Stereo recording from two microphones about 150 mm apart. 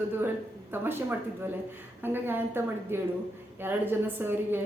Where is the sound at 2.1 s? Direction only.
15° right (ahead or behind).